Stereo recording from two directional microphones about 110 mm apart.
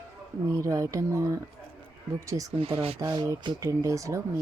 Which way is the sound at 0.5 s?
30° right (ahead or behind).